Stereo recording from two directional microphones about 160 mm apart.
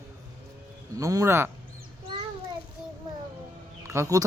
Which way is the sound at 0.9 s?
20° right (ahead or behind).